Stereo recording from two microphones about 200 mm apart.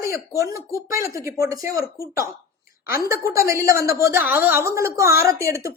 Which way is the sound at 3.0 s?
15° right (ahead or behind).